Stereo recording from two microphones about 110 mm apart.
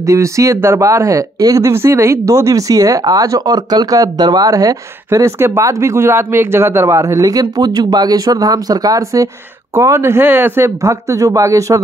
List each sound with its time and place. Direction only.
0.0 s speech: 30° right (ahead or behind)